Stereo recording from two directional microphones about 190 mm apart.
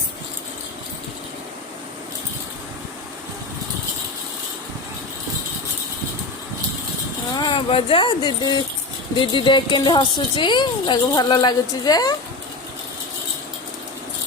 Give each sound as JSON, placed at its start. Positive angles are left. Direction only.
{"t": 7.3, "sound": "a woman's voice", "side_deg": 25}